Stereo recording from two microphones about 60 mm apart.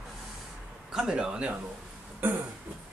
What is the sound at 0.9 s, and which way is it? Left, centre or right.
Speech, centre.